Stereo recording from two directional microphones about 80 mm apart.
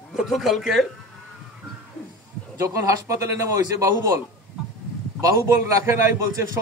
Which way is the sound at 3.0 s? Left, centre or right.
Right.